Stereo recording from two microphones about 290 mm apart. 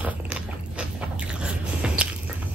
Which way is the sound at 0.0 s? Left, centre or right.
Centre.